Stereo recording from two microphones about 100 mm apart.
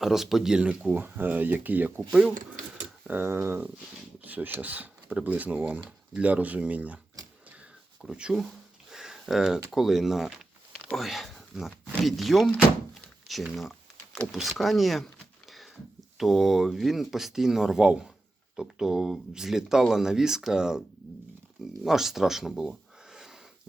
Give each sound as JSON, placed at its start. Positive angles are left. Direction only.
{"t": 0.0, "sound": "speech", "side_deg": -5}
{"t": 3.1, "sound": "speech", "side_deg": -25}
{"t": 8.0, "sound": "speech", "side_deg": -5}
{"t": 8.9, "sound": "a sound", "side_deg": -5}
{"t": 9.7, "sound": "speech", "side_deg": -5}
{"t": 12.9, "sound": "door", "side_deg": 0}
{"t": 13.6, "sound": "typing", "side_deg": 0}
{"t": 14.3, "sound": "a sound", "side_deg": 0}
{"t": 16.1, "sound": "speech", "side_deg": 0}
{"t": 21.8, "sound": "speech", "side_deg": -5}